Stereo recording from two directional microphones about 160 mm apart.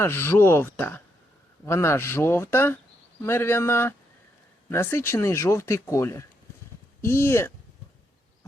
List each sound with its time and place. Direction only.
0.0 s speech: 15° left (ahead or behind)